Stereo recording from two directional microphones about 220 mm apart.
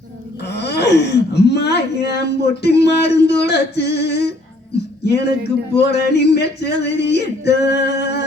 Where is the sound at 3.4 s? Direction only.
50° left (ahead or behind).